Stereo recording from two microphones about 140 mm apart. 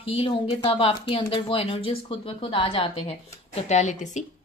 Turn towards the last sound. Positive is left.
turn(degrees=55)  # may be behind; listen again after turning